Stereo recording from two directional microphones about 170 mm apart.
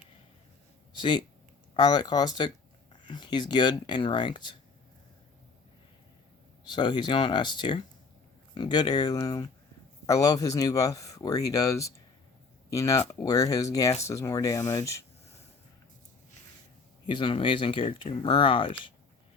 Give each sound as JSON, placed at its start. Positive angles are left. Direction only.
{"t": 0.9, "sound": "speech", "side_deg": 30}
{"t": 6.7, "sound": "speech", "side_deg": 25}
{"t": 17.1, "sound": "speech", "side_deg": 30}